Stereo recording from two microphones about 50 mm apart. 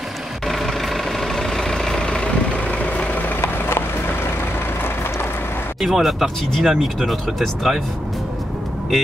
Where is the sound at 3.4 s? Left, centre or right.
Left.